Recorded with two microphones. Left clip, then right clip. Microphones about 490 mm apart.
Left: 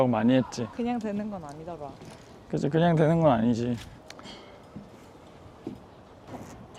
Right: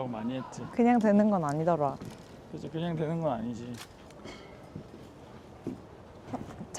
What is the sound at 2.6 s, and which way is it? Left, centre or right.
Speech, left.